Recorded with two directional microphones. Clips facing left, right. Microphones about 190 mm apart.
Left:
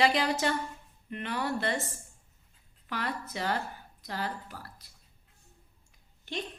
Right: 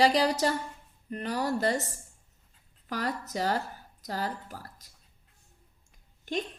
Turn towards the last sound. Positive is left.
turn(degrees=-45)  # may be behind; listen again after turning